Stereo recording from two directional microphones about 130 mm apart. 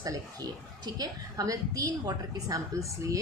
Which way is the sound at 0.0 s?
30° right (ahead or behind).